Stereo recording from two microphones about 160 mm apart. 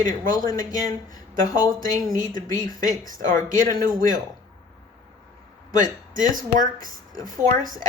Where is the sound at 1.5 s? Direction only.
25° left (ahead or behind).